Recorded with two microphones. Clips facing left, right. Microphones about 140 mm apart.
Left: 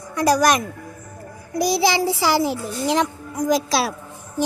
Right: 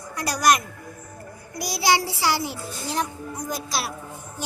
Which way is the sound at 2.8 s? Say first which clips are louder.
Left 7 dB; 90° left.